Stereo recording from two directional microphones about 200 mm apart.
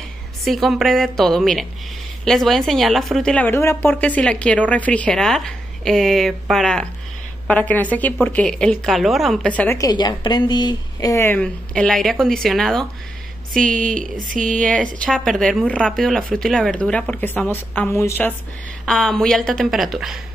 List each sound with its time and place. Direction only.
0.5 s a woman's voice: centre (ahead or behind)
13.5 s speech: 40° right (ahead or behind)
14.6 s speech: 5° left (ahead or behind)